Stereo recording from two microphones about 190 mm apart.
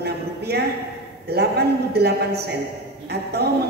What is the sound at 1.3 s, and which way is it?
A man's voice, 60° right (ahead or behind).